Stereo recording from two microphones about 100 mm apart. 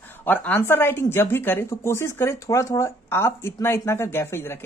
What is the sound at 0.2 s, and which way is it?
Speech, 20° left (ahead or behind).